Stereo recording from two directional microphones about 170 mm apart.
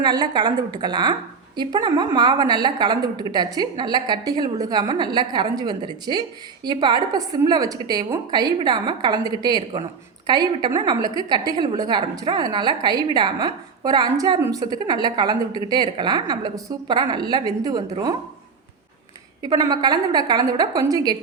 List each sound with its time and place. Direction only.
0.0 s a woman's voice: 25° right (ahead or behind)
19.4 s a woman's voice: 20° right (ahead or behind)